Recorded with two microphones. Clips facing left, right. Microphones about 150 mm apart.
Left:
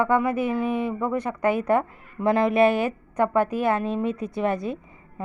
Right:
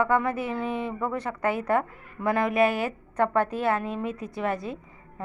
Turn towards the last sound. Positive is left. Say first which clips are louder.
# left 4 dB
turn(degrees=20)  # may be behind; listen again after turning